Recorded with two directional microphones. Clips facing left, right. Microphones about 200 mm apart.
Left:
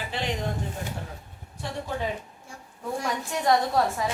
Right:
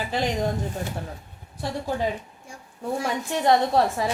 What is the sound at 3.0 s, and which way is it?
A woman's voice, 30° right (ahead or behind).